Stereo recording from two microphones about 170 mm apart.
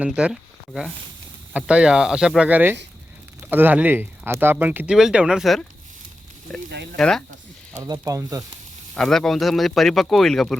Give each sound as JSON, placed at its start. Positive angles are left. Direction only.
{"t": 0.0, "sound": "speech", "side_deg": -5}
{"t": 7.8, "sound": "speech", "side_deg": -20}
{"t": 9.0, "sound": "speech", "side_deg": 5}